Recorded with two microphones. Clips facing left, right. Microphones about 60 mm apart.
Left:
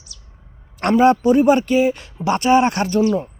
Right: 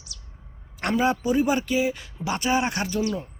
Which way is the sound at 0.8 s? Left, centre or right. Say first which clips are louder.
Left 9 dB; left.